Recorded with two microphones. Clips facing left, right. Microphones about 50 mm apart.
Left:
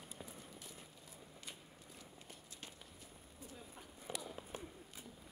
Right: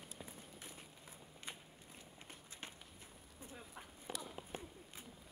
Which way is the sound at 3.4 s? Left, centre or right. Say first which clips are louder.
Right 1 dB; right.